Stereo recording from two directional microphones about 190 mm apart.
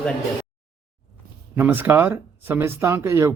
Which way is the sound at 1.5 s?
10° right (ahead or behind).